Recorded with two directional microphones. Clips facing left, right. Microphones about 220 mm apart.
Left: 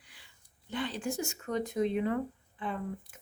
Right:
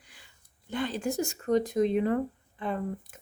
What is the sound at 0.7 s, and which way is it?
Speech, 45° right (ahead or behind).